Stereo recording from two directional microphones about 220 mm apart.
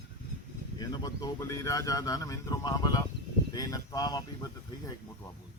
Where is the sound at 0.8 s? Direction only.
15° left (ahead or behind).